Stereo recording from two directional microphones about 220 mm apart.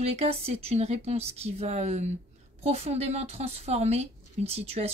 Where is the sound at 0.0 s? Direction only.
30° right (ahead or behind).